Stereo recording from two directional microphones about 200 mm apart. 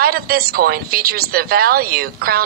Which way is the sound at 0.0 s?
50° right (ahead or behind).